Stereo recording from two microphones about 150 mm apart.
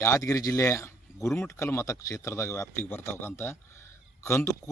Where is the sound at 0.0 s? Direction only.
20° left (ahead or behind).